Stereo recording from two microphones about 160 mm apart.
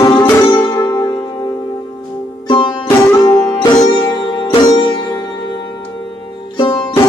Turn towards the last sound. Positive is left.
turn(degrees=30)  # may be behind; listen again after turning